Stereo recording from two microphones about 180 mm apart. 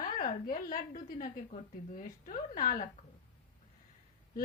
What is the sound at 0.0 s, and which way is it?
A woman's voice, 50° left (ahead or behind).